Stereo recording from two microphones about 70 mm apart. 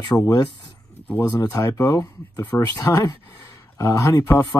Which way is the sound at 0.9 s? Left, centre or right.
Left.